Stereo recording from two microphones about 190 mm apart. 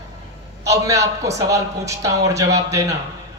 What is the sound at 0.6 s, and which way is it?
A man's voice, 15° right (ahead or behind).